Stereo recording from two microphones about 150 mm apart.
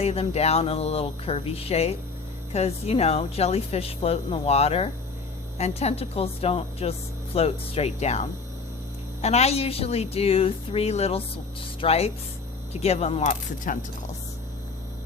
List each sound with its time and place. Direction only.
0.0 s speech: 45° left (ahead or behind)